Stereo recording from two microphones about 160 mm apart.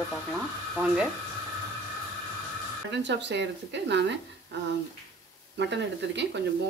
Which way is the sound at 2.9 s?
90° right.